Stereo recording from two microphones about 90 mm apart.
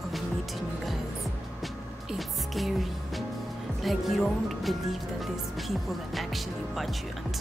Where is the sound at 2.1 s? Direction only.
Centre (ahead or behind).